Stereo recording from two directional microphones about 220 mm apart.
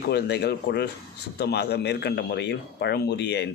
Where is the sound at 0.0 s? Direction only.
50° left (ahead or behind).